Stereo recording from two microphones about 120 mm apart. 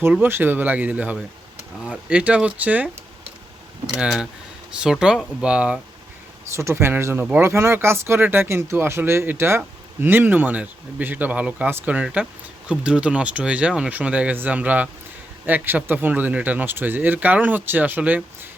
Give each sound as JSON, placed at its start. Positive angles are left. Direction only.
{"t": 0.1, "sound": "speech", "side_deg": -15}
{"t": 3.9, "sound": "speech", "side_deg": -5}
{"t": 6.5, "sound": "speech", "side_deg": -25}